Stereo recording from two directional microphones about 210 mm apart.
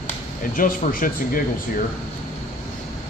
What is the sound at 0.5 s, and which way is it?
Speech, 40° left (ahead or behind).